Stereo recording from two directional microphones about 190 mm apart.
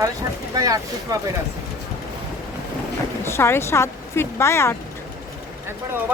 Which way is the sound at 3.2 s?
15° left (ahead or behind).